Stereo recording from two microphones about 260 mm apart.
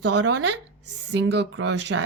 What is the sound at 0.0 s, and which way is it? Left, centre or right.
Speech, right.